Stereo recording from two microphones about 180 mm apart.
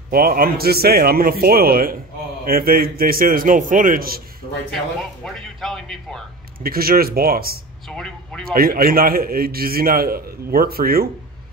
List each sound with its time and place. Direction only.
0.1 s a man's voice: 55° right (ahead or behind)
5.2 s speech: 5° left (ahead or behind)
6.6 s a man's voice: 55° right (ahead or behind)
7.9 s speech: 5° left (ahead or behind)
8.5 s a man's voice: 55° right (ahead or behind)